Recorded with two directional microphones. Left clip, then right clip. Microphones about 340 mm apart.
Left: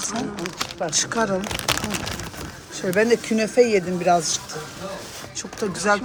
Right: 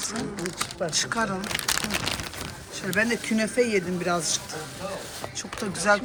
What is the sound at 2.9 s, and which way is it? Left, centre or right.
Speech, centre.